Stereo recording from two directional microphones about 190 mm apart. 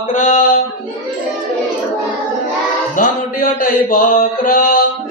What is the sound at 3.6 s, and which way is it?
Speech, 45° left (ahead or behind).